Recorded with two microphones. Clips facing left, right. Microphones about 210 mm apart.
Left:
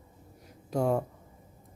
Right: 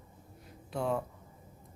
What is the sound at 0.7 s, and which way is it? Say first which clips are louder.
Speech: left 5 dB; 45° left (ahead or behind).